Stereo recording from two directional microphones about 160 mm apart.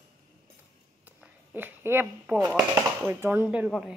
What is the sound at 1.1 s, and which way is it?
Speech, 10° right (ahead or behind).